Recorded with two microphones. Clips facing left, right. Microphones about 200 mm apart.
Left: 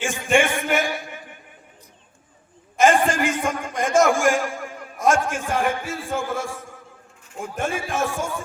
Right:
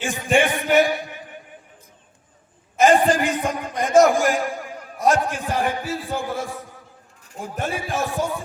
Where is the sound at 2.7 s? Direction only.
35° right (ahead or behind).